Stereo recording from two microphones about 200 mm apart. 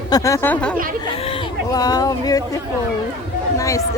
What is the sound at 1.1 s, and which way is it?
Speech, 30° left (ahead or behind).